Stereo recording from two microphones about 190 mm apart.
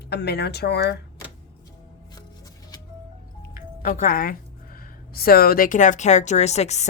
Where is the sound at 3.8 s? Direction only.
50° left (ahead or behind).